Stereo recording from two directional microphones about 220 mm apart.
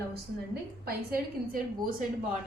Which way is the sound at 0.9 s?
40° right (ahead or behind).